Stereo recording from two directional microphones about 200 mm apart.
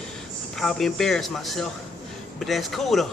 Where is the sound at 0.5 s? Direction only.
Centre (ahead or behind).